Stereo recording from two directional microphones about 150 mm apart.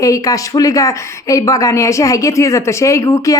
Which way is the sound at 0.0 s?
20° left (ahead or behind).